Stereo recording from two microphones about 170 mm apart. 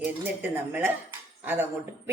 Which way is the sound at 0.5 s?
10° right (ahead or behind).